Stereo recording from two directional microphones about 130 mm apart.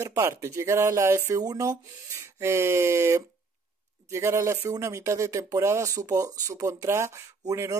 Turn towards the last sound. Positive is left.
turn(degrees=-25)  # may be behind; listen again after turning